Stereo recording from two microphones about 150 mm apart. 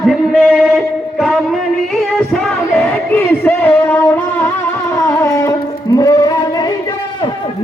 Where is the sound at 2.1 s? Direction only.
5° left (ahead or behind); by 6.3 s 25° left (ahead or behind).